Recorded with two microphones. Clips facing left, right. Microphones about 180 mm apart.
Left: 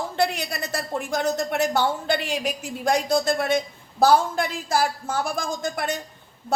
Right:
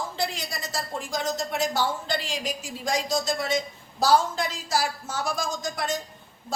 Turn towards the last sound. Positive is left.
turn(degrees=60)  # may be behind; listen again after turning